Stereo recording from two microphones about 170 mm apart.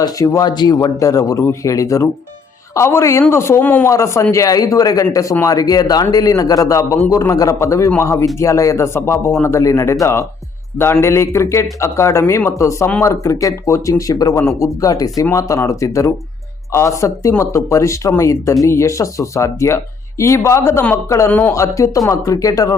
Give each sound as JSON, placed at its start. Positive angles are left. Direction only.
{"t": 0.0, "sound": "speech", "side_deg": 20}